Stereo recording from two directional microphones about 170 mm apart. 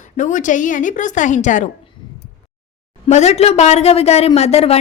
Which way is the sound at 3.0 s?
40° left (ahead or behind).